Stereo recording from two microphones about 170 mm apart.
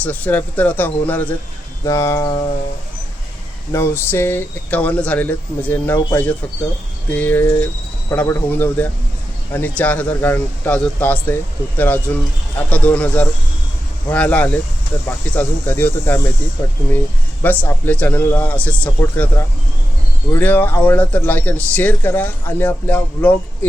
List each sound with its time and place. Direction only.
0.0 s speech: 10° left (ahead or behind)
3.7 s speech: 15° left (ahead or behind)
17.4 s speech: 10° left (ahead or behind)